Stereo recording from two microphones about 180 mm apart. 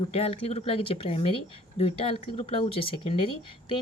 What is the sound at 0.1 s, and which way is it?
A woman's voice, 35° left (ahead or behind).